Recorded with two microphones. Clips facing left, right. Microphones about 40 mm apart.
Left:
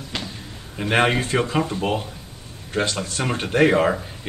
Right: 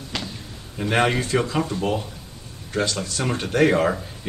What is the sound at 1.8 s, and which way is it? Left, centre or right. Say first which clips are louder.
A man's voice: left 1 dB; left.